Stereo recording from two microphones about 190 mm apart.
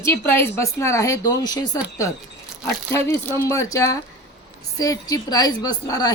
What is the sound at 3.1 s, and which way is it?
A woman's voice, 10° left (ahead or behind).